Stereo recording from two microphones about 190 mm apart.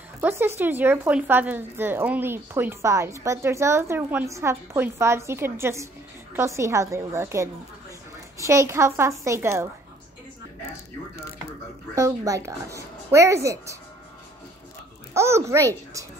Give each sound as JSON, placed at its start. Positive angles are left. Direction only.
{"t": 0.2, "sound": "speech", "side_deg": -10}
{"t": 11.9, "sound": "speech", "side_deg": -15}
{"t": 15.1, "sound": "speech", "side_deg": -15}